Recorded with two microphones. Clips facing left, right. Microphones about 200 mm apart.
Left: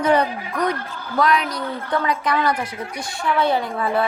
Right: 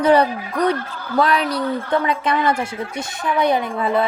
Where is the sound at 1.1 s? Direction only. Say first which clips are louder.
Right 2 dB; 30° right (ahead or behind).